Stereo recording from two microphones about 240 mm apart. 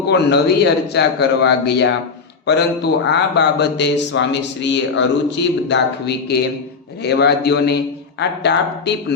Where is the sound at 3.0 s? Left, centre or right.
Left.